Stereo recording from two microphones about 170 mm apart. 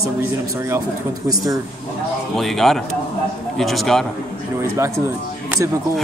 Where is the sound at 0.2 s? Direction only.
15° right (ahead or behind).